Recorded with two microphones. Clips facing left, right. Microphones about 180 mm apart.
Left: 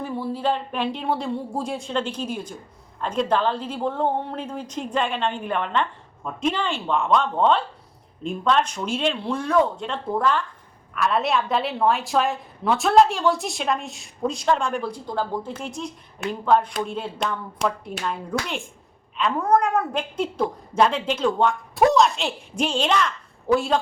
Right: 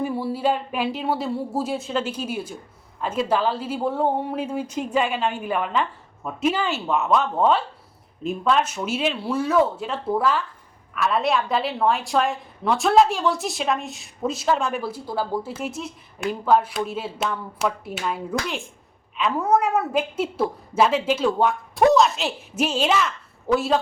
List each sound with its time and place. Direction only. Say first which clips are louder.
0.0 s a woman's voice: right 2 dB; 10° right (ahead or behind)